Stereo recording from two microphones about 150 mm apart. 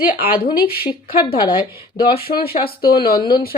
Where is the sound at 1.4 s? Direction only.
35° left (ahead or behind).